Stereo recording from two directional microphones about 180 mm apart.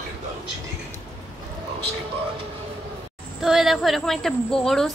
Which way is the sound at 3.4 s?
Centre (ahead or behind).